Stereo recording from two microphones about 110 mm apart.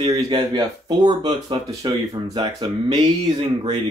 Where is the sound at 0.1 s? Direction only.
40° right (ahead or behind).